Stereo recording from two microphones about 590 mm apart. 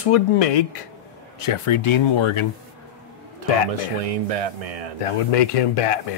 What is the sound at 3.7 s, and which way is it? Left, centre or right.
Speech, right.